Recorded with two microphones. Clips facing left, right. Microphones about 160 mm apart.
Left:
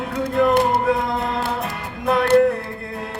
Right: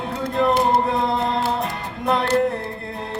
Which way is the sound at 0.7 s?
25° right (ahead or behind).